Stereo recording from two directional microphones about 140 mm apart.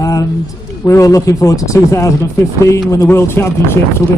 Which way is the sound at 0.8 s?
25° left (ahead or behind).